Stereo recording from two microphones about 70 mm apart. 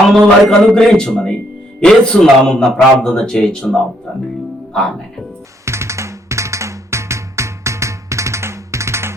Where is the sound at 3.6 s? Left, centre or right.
Centre.